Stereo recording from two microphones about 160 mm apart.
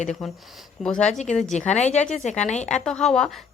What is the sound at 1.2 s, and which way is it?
Speech, 45° left (ahead or behind).